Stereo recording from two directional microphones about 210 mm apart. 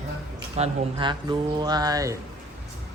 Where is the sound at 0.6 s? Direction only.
20° right (ahead or behind).